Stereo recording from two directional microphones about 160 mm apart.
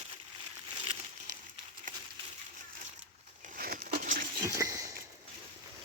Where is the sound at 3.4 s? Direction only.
60° right (ahead or behind).